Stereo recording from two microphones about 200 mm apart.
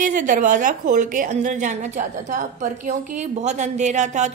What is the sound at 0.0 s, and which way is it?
A woman's voice, 40° right (ahead or behind).